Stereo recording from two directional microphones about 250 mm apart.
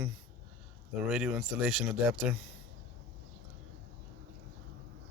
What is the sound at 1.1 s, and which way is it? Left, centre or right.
Speech, centre.